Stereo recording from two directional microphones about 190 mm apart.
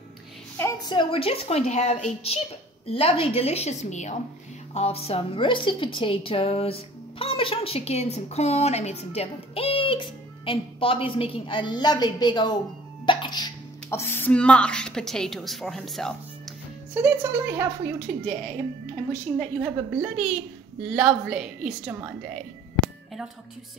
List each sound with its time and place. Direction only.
0.6 s a woman's voice: 20° left (ahead or behind); by 16.1 s centre (ahead or behind)
16.9 s a woman's voice: 10° right (ahead or behind)
19.3 s a woman's voice: centre (ahead or behind)